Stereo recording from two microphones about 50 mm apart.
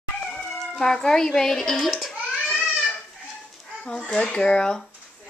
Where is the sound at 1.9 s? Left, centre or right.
Centre.